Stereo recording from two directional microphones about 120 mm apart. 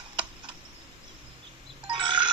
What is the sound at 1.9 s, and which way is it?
Music, 45° right (ahead or behind).